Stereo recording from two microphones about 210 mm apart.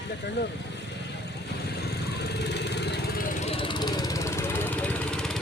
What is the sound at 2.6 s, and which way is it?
Vehicle, 55° left (ahead or behind).